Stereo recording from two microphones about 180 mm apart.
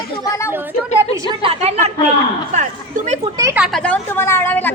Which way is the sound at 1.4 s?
35° right (ahead or behind).